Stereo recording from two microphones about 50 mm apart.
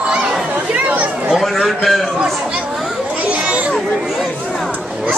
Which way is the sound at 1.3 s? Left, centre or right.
Centre.